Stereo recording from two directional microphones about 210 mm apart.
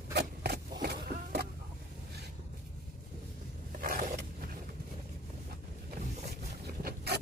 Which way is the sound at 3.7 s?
40° right (ahead or behind).